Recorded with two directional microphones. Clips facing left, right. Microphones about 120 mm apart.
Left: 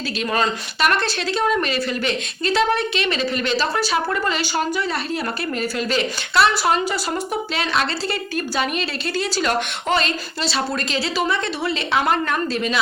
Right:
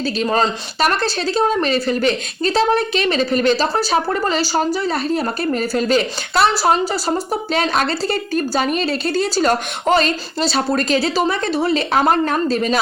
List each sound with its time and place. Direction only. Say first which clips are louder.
0.2 s speech: right 3 dB; 35° right (ahead or behind)